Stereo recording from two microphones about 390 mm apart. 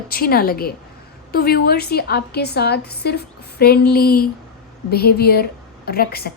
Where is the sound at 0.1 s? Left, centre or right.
Left.